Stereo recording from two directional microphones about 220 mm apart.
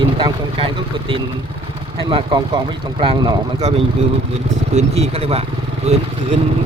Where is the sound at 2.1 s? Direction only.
20° right (ahead or behind).